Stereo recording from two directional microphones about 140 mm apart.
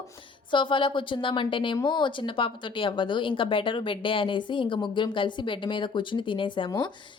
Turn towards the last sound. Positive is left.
turn(degrees=35)  # may be behind; listen again after turning